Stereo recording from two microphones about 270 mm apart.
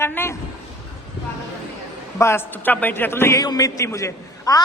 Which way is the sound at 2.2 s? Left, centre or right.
Centre.